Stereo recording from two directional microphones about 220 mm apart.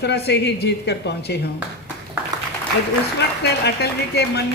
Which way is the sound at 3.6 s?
50° left (ahead or behind).